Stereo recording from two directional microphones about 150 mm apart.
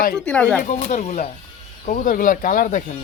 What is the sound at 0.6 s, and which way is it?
Speech, 55° left (ahead or behind).